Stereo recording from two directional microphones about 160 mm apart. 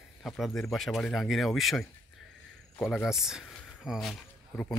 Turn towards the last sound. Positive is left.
turn(degrees=0)  # may be behind; listen again after turning